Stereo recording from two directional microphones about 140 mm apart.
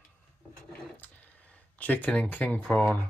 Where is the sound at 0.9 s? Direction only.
10° left (ahead or behind).